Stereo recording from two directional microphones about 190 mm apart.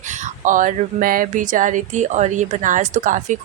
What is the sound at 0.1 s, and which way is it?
Speech, 45° right (ahead or behind).